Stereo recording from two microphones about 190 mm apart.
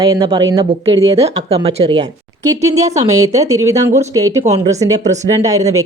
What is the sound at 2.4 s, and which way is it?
A woman's voice, 15° right (ahead or behind).